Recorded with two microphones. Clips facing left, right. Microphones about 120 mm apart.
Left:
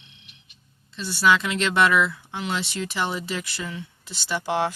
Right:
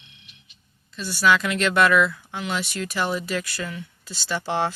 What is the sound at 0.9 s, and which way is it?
Speech, 25° left (ahead or behind).